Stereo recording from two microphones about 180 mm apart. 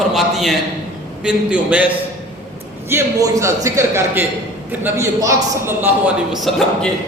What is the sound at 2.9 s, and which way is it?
A man's voice, 15° right (ahead or behind).